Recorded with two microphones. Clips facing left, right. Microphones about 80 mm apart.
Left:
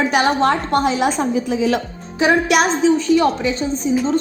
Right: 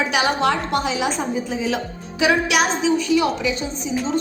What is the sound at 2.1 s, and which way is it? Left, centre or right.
A woman's voice, left.